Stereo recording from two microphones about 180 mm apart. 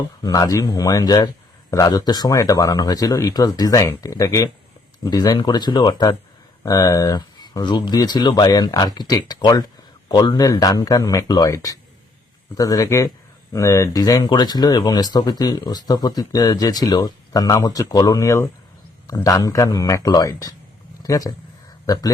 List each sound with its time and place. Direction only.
0.2 s speech: 20° left (ahead or behind)